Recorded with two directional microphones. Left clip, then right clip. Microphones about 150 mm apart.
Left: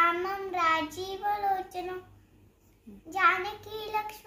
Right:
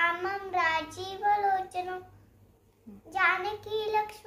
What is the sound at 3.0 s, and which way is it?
Child singing, 15° right (ahead or behind).